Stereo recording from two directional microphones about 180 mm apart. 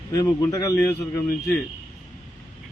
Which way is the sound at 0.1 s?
20° left (ahead or behind).